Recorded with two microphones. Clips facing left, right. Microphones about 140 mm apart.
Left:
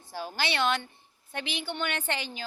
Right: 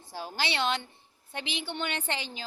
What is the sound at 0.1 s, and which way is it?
A woman's voice, 25° right (ahead or behind).